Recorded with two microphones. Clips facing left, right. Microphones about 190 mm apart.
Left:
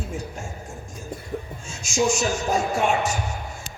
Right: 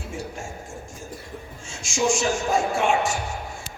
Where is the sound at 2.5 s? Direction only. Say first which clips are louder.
Even; 40° left (ahead or behind).